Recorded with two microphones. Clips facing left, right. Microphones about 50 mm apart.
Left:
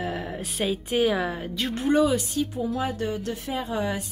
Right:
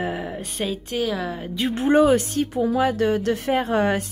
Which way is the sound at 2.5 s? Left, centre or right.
Right.